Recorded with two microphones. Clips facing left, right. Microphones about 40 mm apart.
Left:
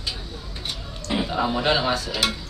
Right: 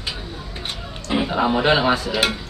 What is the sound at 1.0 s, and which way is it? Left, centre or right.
Speech, right.